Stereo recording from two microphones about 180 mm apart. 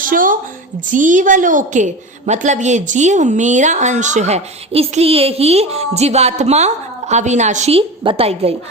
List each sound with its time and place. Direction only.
0.0 s a woman's voice: 50° right (ahead or behind); by 8.5 s 35° right (ahead or behind)